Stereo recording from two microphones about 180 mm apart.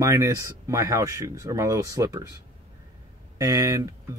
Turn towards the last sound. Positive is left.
turn(degrees=-20)  # may be behind; listen again after turning